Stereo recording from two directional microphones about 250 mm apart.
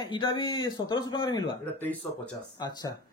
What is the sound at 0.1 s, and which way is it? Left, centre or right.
A man's voice, centre.